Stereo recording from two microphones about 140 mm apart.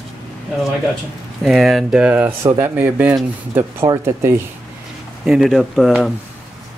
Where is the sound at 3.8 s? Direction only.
25° right (ahead or behind).